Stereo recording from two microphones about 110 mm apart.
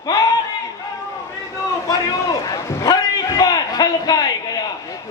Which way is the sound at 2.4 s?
35° left (ahead or behind).